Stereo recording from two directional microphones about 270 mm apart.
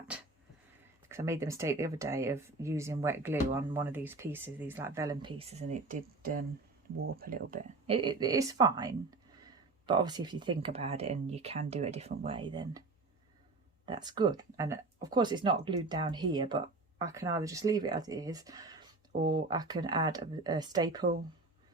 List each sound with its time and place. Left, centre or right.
1.0 s speech: centre
13.8 s speech: centre